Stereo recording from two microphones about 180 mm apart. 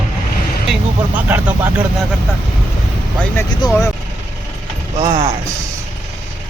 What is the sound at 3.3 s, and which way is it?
Speech, 25° left (ahead or behind).